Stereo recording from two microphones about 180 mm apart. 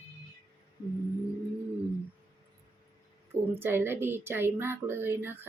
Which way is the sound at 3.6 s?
10° right (ahead or behind).